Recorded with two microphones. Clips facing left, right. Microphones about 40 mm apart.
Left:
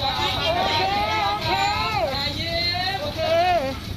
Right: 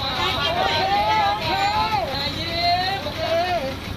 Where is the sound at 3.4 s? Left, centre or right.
Left.